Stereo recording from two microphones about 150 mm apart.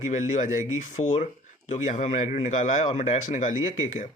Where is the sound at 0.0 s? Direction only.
50° left (ahead or behind).